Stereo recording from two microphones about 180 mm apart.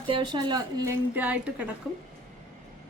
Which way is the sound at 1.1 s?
10° right (ahead or behind).